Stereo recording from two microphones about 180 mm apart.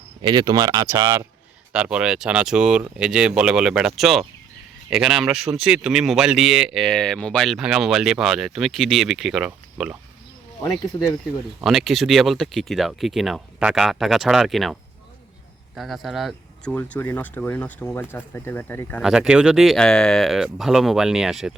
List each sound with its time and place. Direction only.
0.2 s speech: 25° right (ahead or behind); by 9.9 s 5° right (ahead or behind)
11.6 s speech: centre (ahead or behind)
16.7 s speech: 10° left (ahead or behind)
19.0 s speech: 5° right (ahead or behind)